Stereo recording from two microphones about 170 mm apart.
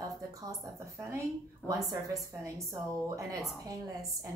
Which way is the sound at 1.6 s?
10° left (ahead or behind).